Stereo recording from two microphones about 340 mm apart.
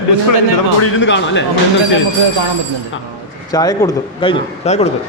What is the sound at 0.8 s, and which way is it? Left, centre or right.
Speech, left.